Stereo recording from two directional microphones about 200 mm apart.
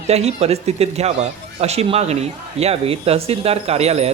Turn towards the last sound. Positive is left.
turn(degrees=-30)  # may be behind; listen again after turning